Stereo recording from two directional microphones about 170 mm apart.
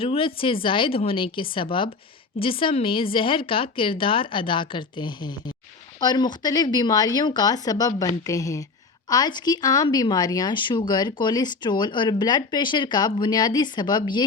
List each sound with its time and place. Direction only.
0.0 s a woman's voice: 30° left (ahead or behind)